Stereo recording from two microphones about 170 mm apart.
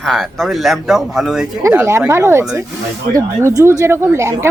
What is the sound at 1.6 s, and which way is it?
Speech, 15° right (ahead or behind).